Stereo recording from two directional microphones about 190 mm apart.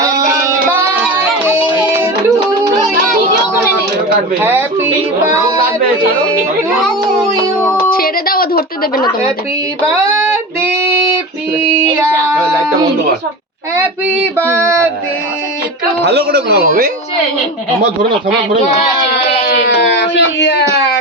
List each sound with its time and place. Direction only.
0.0 s music: 15° right (ahead or behind)
4.4 s speech: 10° right (ahead or behind)
7.9 s a woman's voice: 50° left (ahead or behind)
9.9 s music: 10° right (ahead or behind)
13.8 s speech: 10° right (ahead or behind)
16.0 s speech: 60° right (ahead or behind)
19.1 s a sound: 65° left (ahead or behind)